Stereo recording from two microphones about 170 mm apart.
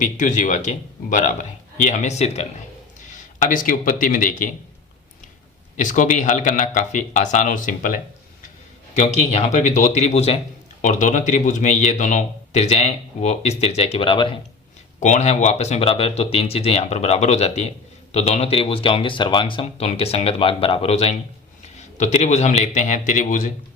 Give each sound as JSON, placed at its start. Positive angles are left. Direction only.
{"t": 0.0, "sound": "a man's voice", "side_deg": 50}
{"t": 5.7, "sound": "a man's voice", "side_deg": 45}
{"t": 9.0, "sound": "a man's voice", "side_deg": 40}
{"t": 15.0, "sound": "a man's voice", "side_deg": 45}